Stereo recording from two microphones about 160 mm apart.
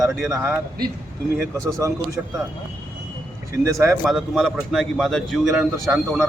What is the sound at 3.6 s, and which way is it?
Speech, 20° right (ahead or behind).